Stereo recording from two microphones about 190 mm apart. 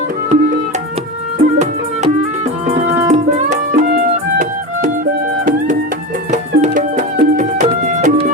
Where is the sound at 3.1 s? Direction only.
40° right (ahead or behind).